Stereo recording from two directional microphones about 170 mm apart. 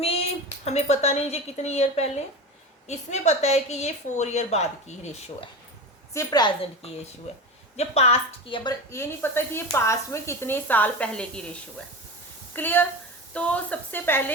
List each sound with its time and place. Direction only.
0.6 s a woman's voice: 40° left (ahead or behind)
6.1 s a woman's voice: 25° left (ahead or behind)
8.9 s a woman's voice: 15° left (ahead or behind)
12.5 s a woman's voice: 10° left (ahead or behind)